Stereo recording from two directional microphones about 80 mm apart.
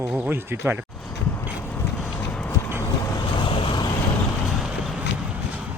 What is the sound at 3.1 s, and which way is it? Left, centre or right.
Vehicle, left.